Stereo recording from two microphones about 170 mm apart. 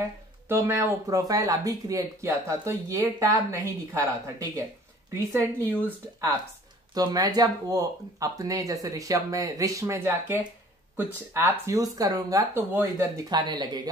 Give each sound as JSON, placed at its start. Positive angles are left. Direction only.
{"t": 0.5, "sound": "a woman's voice", "side_deg": -15}
{"t": 6.9, "sound": "speech", "side_deg": -25}